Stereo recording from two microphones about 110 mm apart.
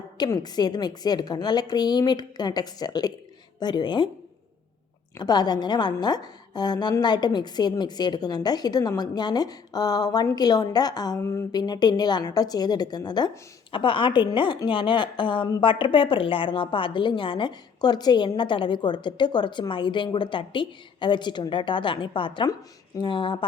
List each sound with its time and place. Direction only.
0.4 s a woman's voice: 40° left (ahead or behind)
5.1 s a woman's voice: 40° left (ahead or behind)
11.2 s speech: 25° left (ahead or behind)
11.5 s a woman's voice: 40° left (ahead or behind)